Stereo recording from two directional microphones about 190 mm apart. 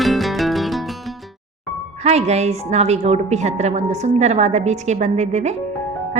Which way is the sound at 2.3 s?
35° right (ahead or behind).